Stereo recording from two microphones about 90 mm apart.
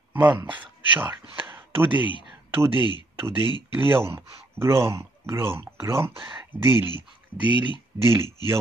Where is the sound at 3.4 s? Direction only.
55° left (ahead or behind).